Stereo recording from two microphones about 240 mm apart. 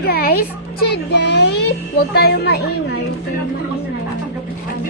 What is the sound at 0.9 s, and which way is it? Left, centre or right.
A woman's voice, left.